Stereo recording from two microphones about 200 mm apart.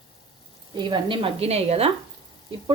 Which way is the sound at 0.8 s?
25° right (ahead or behind).